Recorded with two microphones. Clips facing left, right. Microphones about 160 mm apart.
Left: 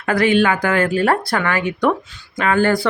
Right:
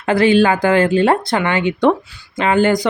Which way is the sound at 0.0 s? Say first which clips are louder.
Right 3 dB; 25° right (ahead or behind).